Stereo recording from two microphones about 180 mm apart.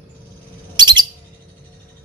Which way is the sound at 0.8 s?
25° right (ahead or behind).